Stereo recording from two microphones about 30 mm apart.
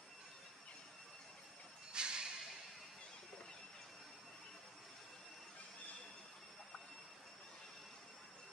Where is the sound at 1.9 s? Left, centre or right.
Right.